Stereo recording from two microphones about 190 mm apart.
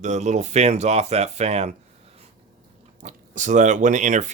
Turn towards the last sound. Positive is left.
turn(degrees=-40)  # may be behind; listen again after turning